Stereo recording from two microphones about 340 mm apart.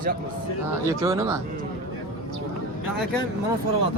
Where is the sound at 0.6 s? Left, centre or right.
Centre.